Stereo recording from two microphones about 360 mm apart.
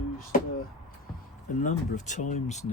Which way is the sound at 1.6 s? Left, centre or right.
Left.